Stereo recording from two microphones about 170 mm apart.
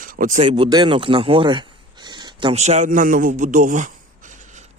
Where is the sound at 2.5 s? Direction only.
40° right (ahead or behind).